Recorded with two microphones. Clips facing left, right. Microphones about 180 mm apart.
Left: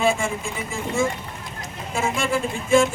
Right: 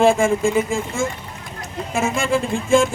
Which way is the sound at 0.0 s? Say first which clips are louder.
Right 7 dB; 50° right (ahead or behind).